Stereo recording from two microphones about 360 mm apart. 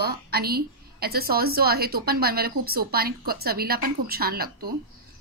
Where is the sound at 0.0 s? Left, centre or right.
Right.